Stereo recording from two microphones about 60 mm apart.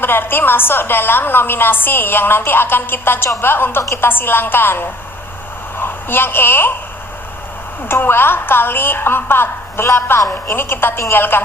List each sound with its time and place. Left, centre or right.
0.0 s a woman's voice: left
7.9 s a woman's voice: left